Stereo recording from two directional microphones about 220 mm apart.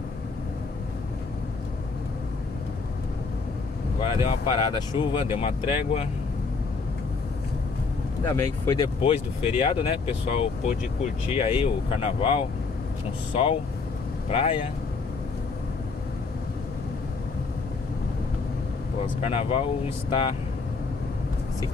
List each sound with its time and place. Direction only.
4.0 s speech: 25° left (ahead or behind)
8.6 s speech: 20° left (ahead or behind)
19.2 s speech: 25° left (ahead or behind)